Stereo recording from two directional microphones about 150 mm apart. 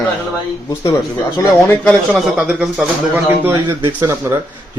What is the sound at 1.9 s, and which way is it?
A man's voice, centre (ahead or behind).